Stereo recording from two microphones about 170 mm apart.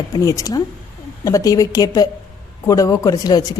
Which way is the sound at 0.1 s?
20° left (ahead or behind).